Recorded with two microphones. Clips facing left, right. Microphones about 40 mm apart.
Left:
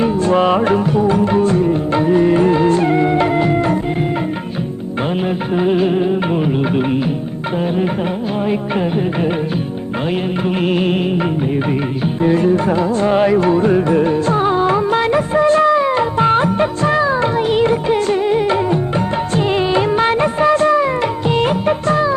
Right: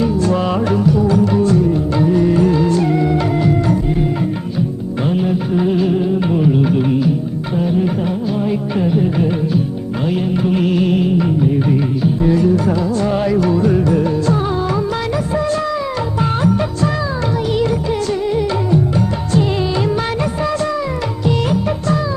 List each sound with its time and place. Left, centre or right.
0.0 s music: left
5.1 s music: left
8.4 s music: left
10.4 s music: left
21.2 s music of bollywood: left